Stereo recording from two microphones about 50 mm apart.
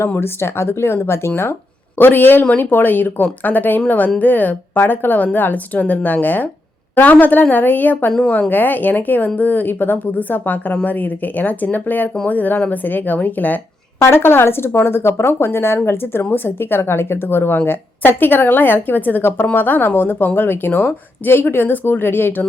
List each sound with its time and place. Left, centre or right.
0.0 s speech: left
2.0 s a woman's voice: left
12.8 s a woman's voice: left
14.0 s a woman's voice: left